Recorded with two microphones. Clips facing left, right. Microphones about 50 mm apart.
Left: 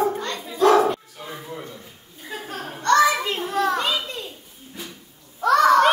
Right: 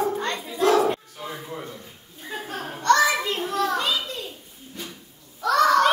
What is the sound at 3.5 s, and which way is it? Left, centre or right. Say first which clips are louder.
Children playing: left 3 dB; left.